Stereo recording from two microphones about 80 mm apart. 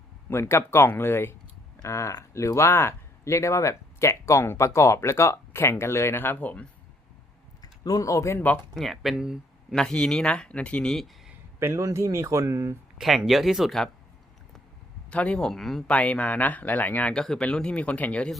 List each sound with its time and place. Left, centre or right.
0.3 s speech: left
7.6 s speech: left
8.7 s speech: centre
9.7 s speech: centre
11.6 s speech: right
13.0 s speech: centre
15.1 s speech: centre
15.9 s speech: centre